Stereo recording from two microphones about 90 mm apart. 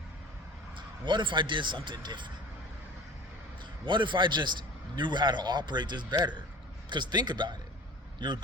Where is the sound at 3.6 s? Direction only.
60° right (ahead or behind).